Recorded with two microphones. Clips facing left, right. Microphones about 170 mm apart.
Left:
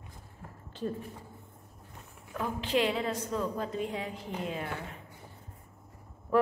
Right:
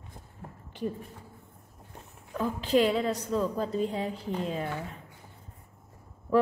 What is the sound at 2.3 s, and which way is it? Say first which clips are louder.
A woman's voice: right 5 dB; 35° right (ahead or behind).